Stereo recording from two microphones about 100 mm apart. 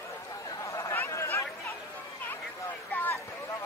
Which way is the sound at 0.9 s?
25° left (ahead or behind).